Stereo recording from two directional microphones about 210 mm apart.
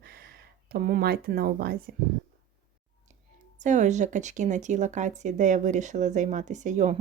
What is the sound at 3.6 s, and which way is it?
A woman's voice, 35° right (ahead or behind).